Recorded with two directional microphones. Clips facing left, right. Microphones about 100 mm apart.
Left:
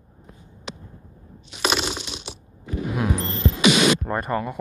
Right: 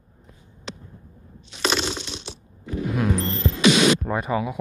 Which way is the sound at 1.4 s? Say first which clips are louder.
Even; 10° left (ahead or behind).